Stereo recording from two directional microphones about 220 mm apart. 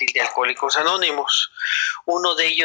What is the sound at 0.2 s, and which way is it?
Speech, 45° left (ahead or behind).